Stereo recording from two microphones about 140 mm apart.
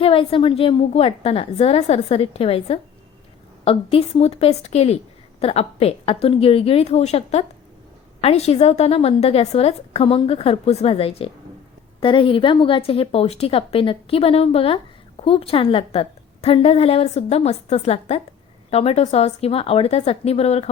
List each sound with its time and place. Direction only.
0.0 s a woman's voice: 40° left (ahead or behind)